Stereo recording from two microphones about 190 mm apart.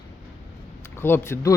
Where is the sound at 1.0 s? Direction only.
10° left (ahead or behind).